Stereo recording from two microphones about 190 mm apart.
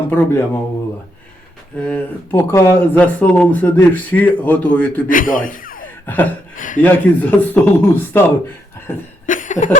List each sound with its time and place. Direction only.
0.1 s speech: 10° left (ahead or behind)
1.8 s speech: 5° left (ahead or behind)
5.0 s a man's voice: 45° left (ahead or behind)
6.8 s speech: 10° left (ahead or behind)
9.2 s a sound: 45° left (ahead or behind)